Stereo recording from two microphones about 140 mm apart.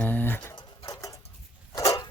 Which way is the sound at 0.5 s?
30° left (ahead or behind).